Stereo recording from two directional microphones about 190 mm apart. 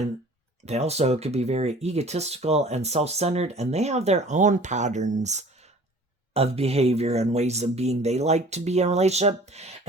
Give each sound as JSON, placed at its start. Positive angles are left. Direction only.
{"t": 0.6, "sound": "speech", "side_deg": -35}